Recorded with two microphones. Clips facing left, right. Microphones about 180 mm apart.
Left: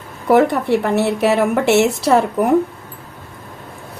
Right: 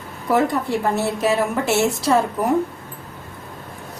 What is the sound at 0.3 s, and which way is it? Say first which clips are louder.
A woman's voice: left 6 dB; 65° left (ahead or behind).